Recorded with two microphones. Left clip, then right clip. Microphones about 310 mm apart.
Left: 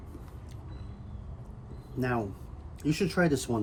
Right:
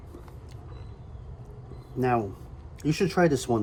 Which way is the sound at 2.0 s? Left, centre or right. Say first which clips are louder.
Right 6 dB; centre.